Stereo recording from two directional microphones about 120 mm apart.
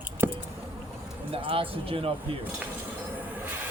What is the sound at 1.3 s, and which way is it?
Speech, 50° right (ahead or behind).